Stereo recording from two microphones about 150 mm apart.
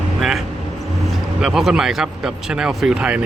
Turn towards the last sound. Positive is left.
turn(degrees=-5)  # may be behind; listen again after turning